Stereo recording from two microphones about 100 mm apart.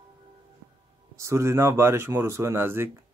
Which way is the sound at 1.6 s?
25° right (ahead or behind).